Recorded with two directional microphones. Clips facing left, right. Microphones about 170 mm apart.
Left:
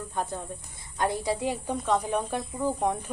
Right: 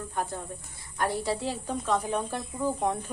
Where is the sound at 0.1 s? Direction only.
20° left (ahead or behind).